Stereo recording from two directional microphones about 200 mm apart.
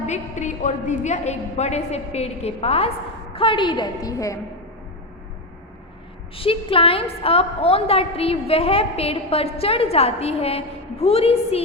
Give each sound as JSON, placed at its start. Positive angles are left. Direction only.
{"t": 0.1, "sound": "a woman's voice", "side_deg": 35}
{"t": 6.3, "sound": "a woman's voice", "side_deg": 25}